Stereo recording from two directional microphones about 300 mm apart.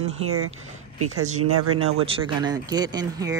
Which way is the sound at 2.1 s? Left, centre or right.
Centre.